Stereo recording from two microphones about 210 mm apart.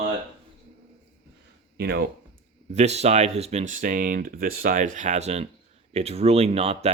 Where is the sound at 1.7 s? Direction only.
50° right (ahead or behind).